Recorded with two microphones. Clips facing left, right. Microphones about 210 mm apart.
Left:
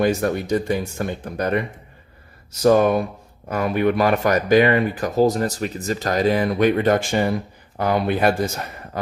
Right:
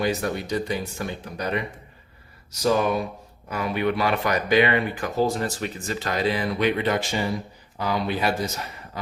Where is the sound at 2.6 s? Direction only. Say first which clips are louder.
Left 6 dB; 50° left (ahead or behind).